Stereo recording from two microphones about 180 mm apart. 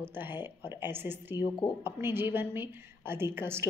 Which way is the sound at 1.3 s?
20° left (ahead or behind).